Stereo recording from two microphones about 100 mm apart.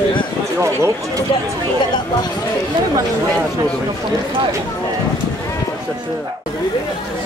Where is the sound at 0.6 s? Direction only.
30° right (ahead or behind).